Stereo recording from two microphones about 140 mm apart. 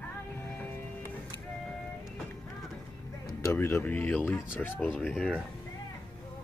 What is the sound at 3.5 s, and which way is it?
Speech, 15° left (ahead or behind).